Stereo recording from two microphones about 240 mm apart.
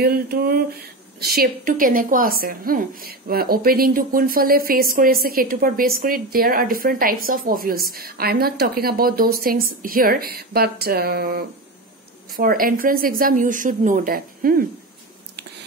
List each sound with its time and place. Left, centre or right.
0.0 s speech: right